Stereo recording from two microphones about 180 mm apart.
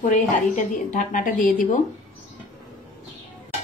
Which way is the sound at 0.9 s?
45° left (ahead or behind).